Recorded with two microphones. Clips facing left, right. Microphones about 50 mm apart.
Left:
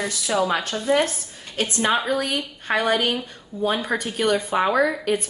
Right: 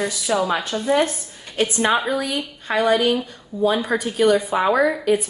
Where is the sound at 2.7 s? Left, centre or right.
Centre.